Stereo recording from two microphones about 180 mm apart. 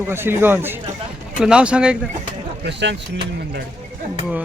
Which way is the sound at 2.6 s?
75° right (ahead or behind).